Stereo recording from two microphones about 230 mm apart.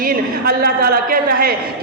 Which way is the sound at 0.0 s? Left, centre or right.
Right.